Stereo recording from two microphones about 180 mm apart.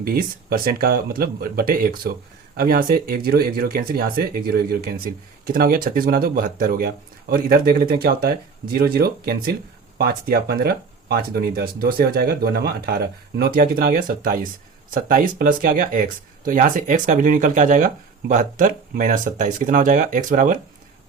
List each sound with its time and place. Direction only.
0.0 s speech: 55° right (ahead or behind)